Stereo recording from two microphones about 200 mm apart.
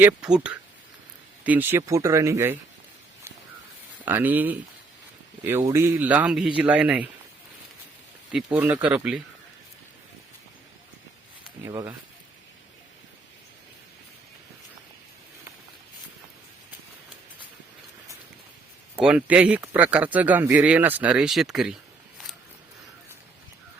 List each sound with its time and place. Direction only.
0.0 s speech: 5° right (ahead or behind)
4.0 s speech: 10° right (ahead or behind)
8.3 s speech: 5° right (ahead or behind)
11.6 s speech: 15° right (ahead or behind)
18.9 s speech: 5° right (ahead or behind)